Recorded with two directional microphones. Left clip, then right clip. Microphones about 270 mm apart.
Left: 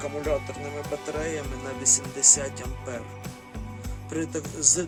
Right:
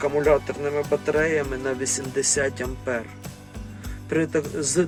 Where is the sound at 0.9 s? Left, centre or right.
Centre.